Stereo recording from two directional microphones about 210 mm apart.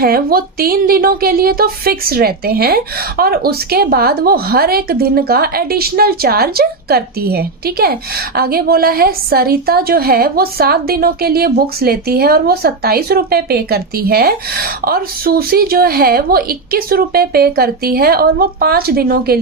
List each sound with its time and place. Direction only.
0.0 s speech: 45° right (ahead or behind)